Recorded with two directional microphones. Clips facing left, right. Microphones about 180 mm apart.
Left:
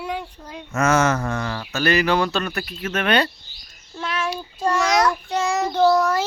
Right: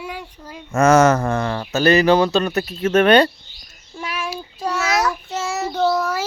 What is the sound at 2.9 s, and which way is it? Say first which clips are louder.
Speech: right 8 dB; 45° right (ahead or behind).